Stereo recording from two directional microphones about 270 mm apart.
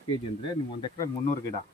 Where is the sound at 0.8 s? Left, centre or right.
Centre.